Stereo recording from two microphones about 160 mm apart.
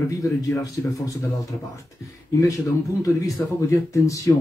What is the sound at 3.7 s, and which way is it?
Speech, 20° left (ahead or behind).